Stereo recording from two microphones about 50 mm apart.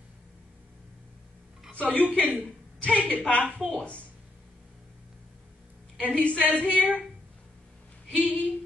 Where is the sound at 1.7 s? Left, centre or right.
Left.